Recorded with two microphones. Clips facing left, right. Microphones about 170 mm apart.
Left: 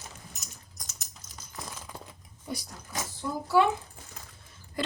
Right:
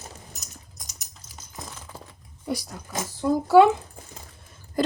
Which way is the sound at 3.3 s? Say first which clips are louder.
Right 9 dB; 90° right.